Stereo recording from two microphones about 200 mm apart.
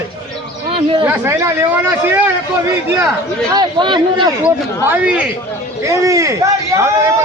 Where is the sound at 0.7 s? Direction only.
25° right (ahead or behind).